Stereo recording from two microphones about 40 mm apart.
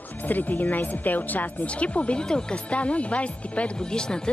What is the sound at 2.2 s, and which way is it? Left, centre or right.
Speech, centre.